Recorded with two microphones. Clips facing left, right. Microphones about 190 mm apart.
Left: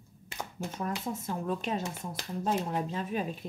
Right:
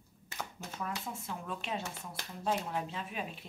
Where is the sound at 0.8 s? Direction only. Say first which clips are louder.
Left 5 dB; 40° left (ahead or behind).